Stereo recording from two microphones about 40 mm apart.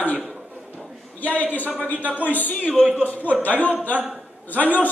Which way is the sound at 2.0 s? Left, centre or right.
Right.